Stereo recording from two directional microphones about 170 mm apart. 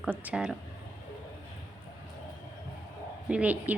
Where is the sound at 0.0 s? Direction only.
10° right (ahead or behind).